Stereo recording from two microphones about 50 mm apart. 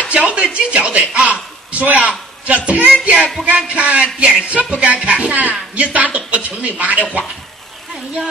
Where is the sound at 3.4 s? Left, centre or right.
Right.